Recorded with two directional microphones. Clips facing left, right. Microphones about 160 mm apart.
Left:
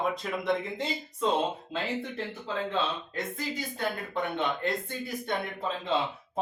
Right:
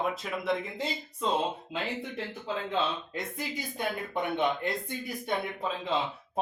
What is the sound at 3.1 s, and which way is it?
Speech, 15° right (ahead or behind).